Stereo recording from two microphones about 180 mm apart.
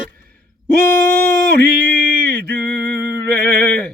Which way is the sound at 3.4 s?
65° right (ahead or behind).